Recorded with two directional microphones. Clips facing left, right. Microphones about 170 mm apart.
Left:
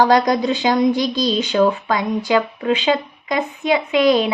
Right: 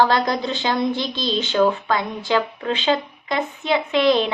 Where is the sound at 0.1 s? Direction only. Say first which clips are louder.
Left 5 dB; 15° left (ahead or behind).